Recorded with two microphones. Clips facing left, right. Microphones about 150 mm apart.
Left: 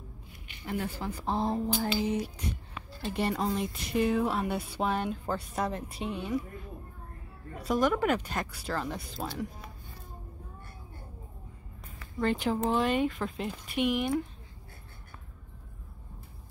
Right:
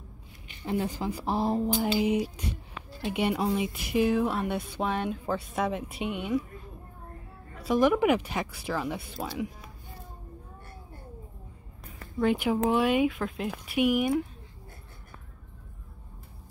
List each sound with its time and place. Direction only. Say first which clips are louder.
0.7 s speech: right 4 dB; 15° right (ahead or behind)
7.6 s speech: right 4 dB; 5° right (ahead or behind)
12.2 s speech: right 3 dB; 10° right (ahead or behind)